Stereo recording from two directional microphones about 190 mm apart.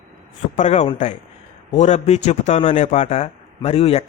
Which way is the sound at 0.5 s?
40° left (ahead or behind).